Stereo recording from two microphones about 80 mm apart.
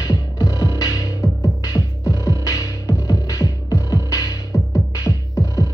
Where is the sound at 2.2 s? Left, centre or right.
Left.